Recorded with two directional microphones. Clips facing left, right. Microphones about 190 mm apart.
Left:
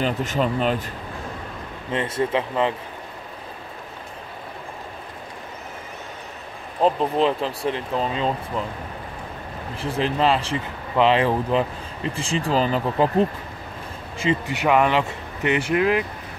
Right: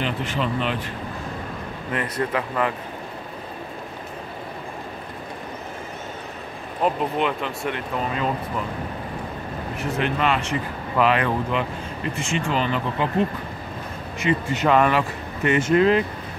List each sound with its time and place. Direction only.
0.0 s speech: 40° left (ahead or behind)
1.9 s speech: 25° left (ahead or behind)
6.8 s speech: 30° left (ahead or behind)
9.8 s speech: 30° left (ahead or behind)
14.5 s speech: 15° left (ahead or behind)